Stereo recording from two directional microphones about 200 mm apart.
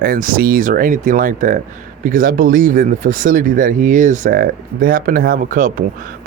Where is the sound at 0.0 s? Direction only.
45° right (ahead or behind).